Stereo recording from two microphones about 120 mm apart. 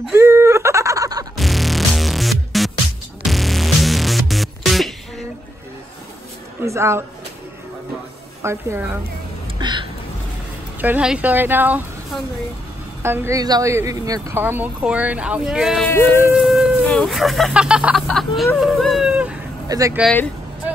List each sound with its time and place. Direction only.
0.1 s fowl: 20° right (ahead or behind)
1.3 s music: centre (ahead or behind)
6.6 s a sound: 25° right (ahead or behind)
8.4 s speech: 20° right (ahead or behind)
9.6 s a sound: 40° right (ahead or behind)
10.8 s speech: 10° right (ahead or behind)
13.0 s speech: 20° right (ahead or behind)
13.4 s speech: 30° right (ahead or behind)
14.4 s speech: 15° right (ahead or behind)